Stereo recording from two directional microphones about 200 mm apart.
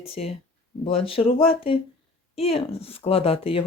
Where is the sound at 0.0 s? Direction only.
30° left (ahead or behind).